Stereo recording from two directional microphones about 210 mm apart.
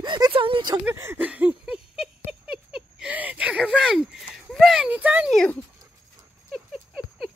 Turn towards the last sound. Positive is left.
turn(degrees=0)  # may be behind; listen again after turning